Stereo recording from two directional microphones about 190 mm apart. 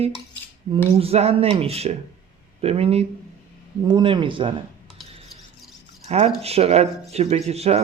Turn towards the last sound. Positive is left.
turn(degrees=-35)  # may be behind; listen again after turning